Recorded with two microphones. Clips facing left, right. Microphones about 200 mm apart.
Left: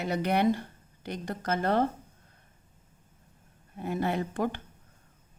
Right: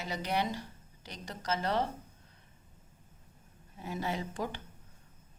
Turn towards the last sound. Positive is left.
turn(degrees=55)  # may be behind; listen again after turning